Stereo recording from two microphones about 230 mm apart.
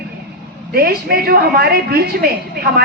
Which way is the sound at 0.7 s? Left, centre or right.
Right.